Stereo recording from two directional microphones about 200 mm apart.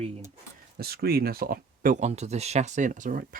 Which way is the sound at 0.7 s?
50° right (ahead or behind).